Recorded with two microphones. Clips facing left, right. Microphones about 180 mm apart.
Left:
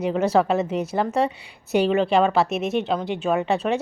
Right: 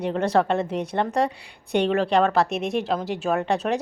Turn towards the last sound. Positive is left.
turn(degrees=0)  # may be behind; listen again after turning